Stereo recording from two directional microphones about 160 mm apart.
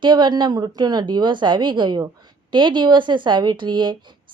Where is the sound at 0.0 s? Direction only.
30° right (ahead or behind).